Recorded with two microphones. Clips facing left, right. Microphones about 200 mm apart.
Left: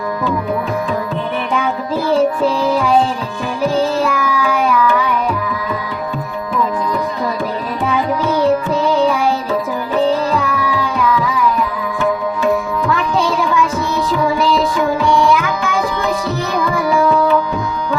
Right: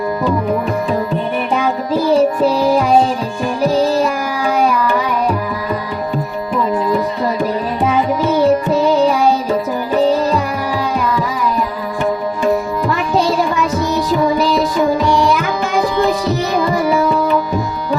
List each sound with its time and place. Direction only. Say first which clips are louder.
2.1 s music: right 1 dB; 10° right (ahead or behind)
4.0 s child singing: even; 40° right (ahead or behind)
8.3 s music: right 2 dB; 10° right (ahead or behind)
10.0 s music: right 1 dB; 40° right (ahead or behind)